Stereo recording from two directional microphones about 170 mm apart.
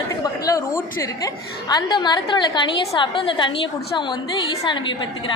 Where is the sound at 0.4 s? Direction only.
20° left (ahead or behind).